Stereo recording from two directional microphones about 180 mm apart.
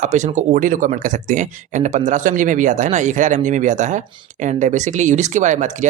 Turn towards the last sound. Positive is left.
turn(degrees=-40)  # may be behind; listen again after turning